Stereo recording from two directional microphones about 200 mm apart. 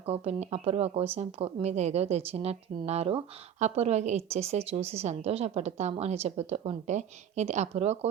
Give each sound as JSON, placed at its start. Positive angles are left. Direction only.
{"t": 0.0, "sound": "a woman's voice", "side_deg": -30}